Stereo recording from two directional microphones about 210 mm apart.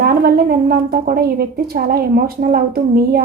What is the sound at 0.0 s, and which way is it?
Speech, 45° right (ahead or behind).